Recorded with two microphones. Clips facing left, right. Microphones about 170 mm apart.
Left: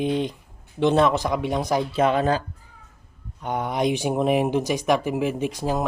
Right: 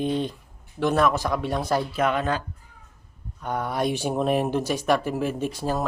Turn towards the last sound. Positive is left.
turn(degrees=15)  # may be behind; listen again after turning